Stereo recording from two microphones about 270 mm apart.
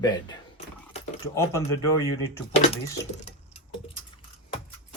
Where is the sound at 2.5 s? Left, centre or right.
Left.